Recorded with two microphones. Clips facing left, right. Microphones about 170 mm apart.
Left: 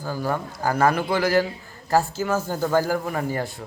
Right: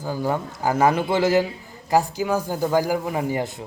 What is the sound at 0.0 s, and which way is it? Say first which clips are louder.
A man's voice: right 2 dB; 20° right (ahead or behind).